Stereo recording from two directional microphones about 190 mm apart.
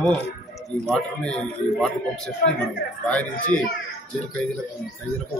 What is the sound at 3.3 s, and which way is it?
Speech, 45° left (ahead or behind).